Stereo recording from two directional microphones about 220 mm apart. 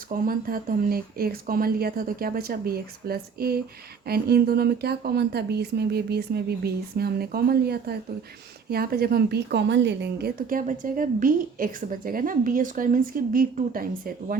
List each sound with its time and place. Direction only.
0.1 s a woman's voice: 40° right (ahead or behind)